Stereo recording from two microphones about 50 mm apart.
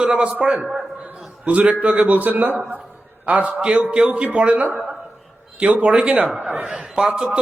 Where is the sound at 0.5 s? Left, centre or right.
Centre.